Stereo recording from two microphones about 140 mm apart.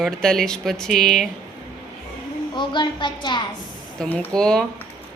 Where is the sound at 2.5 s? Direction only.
35° left (ahead or behind).